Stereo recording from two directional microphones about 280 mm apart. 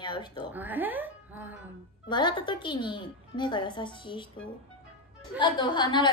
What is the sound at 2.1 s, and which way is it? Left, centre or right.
A woman's voice, centre.